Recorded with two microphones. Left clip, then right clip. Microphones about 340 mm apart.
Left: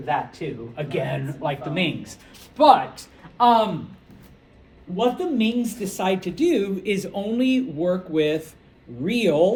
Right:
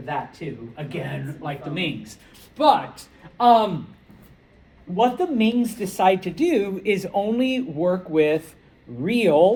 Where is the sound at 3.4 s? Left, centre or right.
Centre.